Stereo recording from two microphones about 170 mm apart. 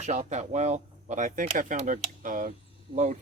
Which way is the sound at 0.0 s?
45° right (ahead or behind).